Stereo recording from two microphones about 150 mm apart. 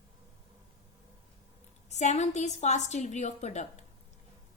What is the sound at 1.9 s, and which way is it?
A woman's voice, 50° left (ahead or behind).